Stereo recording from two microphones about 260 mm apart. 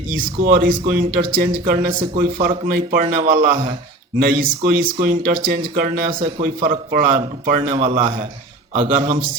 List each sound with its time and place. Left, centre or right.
0.3 s speech: right
2.7 s speech: right
5.9 s speech: centre